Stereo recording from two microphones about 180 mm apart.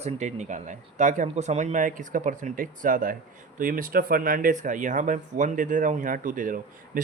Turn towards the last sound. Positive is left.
turn(degrees=-50)  # may be behind; listen again after turning